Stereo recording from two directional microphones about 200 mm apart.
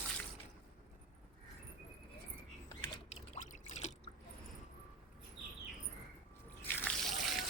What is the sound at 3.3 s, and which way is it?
Drip, 40° left (ahead or behind).